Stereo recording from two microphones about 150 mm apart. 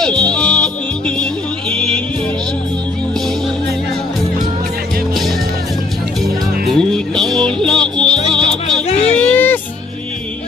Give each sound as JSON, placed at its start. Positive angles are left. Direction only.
{"t": 0.0, "sound": "music", "side_deg": 5}
{"t": 6.7, "sound": "music", "side_deg": 5}
{"t": 8.8, "sound": "a sound", "side_deg": 45}
{"t": 9.2, "sound": "music", "side_deg": 10}